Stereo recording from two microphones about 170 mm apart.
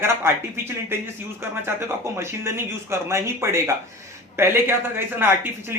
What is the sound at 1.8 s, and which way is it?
Speech, 15° right (ahead or behind).